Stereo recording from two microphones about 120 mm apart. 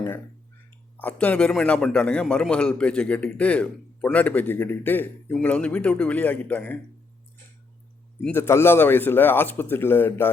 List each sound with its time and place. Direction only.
0.9 s a man's voice: 15° left (ahead or behind)
8.3 s a man's voice: 20° left (ahead or behind)